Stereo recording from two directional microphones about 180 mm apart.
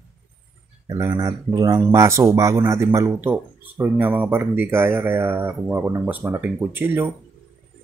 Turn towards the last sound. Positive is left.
turn(degrees=-10)  # may be behind; listen again after turning